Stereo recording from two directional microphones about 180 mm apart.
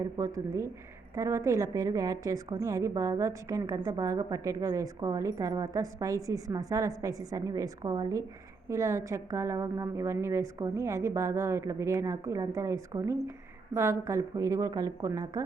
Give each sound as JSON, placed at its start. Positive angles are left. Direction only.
{"t": 0.0, "sound": "a woman's voice", "side_deg": -20}